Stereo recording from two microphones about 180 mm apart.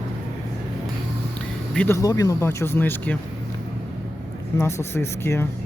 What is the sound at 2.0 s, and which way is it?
Speech, 20° left (ahead or behind).